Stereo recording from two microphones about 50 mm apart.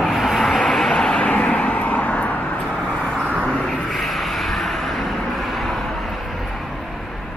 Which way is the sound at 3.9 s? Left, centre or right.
Centre.